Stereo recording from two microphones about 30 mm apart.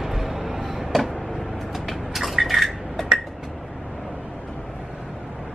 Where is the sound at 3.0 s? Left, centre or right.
Centre.